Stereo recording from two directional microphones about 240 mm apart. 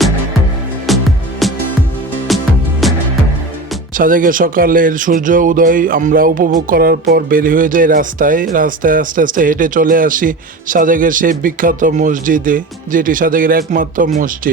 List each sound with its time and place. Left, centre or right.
0.9 s music: centre
3.9 s speech: right